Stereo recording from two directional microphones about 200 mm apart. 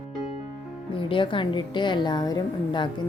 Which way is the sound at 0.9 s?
25° left (ahead or behind).